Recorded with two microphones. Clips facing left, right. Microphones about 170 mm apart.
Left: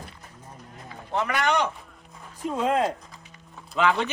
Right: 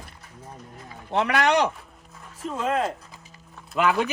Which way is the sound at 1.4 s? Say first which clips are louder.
Right 3 dB; 35° right (ahead or behind).